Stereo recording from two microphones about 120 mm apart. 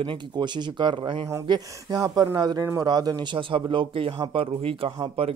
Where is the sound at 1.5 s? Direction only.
30° right (ahead or behind).